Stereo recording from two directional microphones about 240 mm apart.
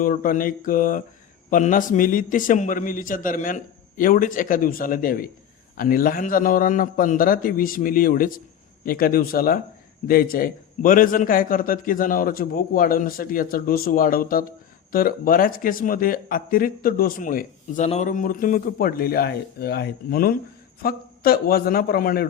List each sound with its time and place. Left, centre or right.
0.0 s speech: left